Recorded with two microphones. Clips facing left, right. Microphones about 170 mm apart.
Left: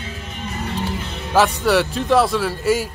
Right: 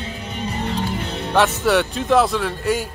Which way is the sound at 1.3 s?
Centre (ahead or behind).